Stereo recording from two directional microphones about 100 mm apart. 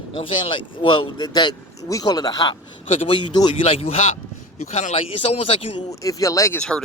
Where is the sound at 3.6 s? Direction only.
70° left (ahead or behind).